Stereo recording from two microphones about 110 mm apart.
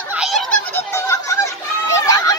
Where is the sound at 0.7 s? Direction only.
30° left (ahead or behind).